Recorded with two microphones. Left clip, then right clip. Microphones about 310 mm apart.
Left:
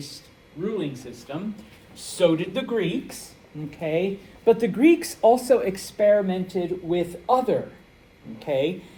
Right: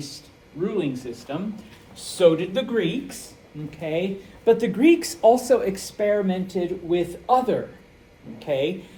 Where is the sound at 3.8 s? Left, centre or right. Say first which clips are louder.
Left 1 dB; centre.